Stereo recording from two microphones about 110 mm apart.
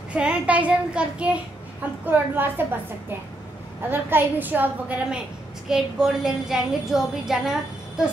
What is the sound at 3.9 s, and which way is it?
A child's voice, 20° right (ahead or behind).